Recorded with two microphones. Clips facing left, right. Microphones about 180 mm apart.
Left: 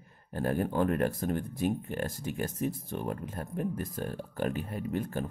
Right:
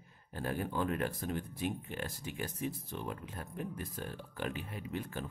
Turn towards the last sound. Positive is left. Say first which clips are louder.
# left 7 dB
turn(degrees=45)  # may be behind; listen again after turning